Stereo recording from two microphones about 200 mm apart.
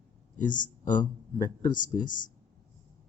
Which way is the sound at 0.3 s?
40° left (ahead or behind).